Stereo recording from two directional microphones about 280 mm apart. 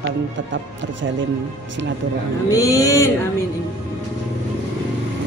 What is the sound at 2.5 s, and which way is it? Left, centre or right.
Speech, centre.